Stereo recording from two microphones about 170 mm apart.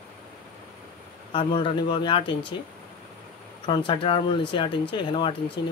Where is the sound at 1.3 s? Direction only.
30° left (ahead or behind).